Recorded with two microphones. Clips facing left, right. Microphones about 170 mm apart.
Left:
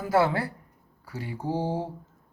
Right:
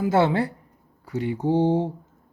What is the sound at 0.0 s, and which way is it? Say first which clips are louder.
Speech: right 4 dB; 25° right (ahead or behind).